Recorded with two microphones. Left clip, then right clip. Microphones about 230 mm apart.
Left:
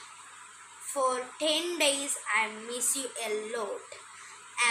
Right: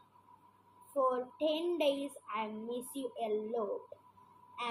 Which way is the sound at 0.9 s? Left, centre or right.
Left.